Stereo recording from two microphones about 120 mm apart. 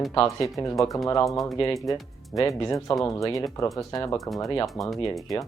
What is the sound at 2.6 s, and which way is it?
Speech, 30° left (ahead or behind).